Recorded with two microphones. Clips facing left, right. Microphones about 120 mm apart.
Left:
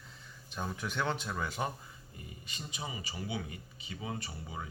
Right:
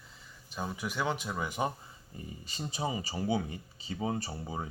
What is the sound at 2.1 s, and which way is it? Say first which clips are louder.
Speech: right 6 dB; 35° right (ahead or behind).